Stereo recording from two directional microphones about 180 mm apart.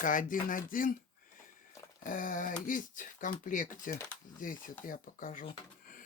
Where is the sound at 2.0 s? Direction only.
45° left (ahead or behind).